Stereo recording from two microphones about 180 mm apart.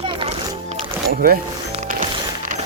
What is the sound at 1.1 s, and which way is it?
Speech, 60° right (ahead or behind).